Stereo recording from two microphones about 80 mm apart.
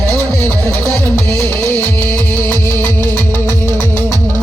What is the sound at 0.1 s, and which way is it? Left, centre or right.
Music, centre.